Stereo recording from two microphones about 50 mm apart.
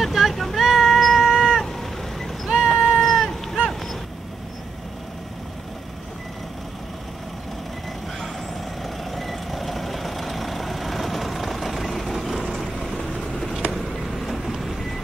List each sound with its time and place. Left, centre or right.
0.0 s cat: centre
3.6 s a sound: centre
8.8 s vehicle: centre
13.7 s vehicle: centre